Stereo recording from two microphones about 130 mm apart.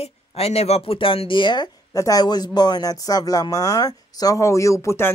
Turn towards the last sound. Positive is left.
turn(degrees=20)  # may be behind; listen again after turning